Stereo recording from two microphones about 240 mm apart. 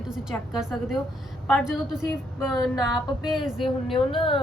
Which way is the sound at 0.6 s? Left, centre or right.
Centre.